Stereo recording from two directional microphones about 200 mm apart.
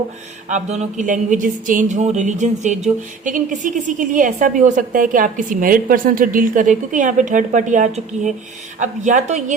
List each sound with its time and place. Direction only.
0.4 s speech: 35° right (ahead or behind)